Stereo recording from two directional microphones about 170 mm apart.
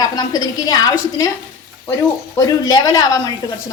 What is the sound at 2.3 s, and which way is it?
Speech, 20° left (ahead or behind).